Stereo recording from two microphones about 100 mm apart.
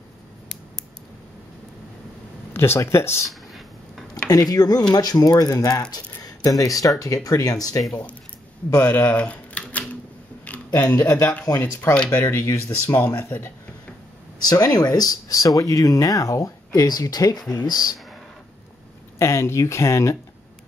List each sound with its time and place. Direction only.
2.5 s speech: 25° left (ahead or behind)
3.3 s a sound: centre (ahead or behind)
4.3 s speech: 40° left (ahead or behind)
7.9 s speech: 15° left (ahead or behind)
8.8 s typewriter: 15° left (ahead or behind)
10.7 s speech: 20° left (ahead or behind)
14.4 s speech: 40° left (ahead or behind)
19.1 s speech: 30° left (ahead or behind)